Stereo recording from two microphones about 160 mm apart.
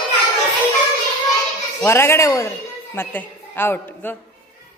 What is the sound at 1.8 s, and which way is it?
A man's voice, 15° left (ahead or behind).